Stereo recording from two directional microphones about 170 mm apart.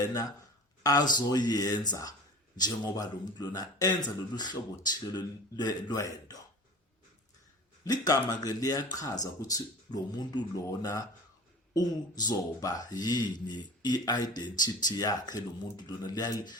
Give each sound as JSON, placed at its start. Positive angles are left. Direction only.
{"t": 0.0, "sound": "speech", "side_deg": 20}
{"t": 7.9, "sound": "speech", "side_deg": 20}